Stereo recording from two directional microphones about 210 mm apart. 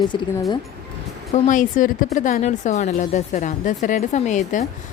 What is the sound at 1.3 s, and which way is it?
A woman's voice, 40° left (ahead or behind).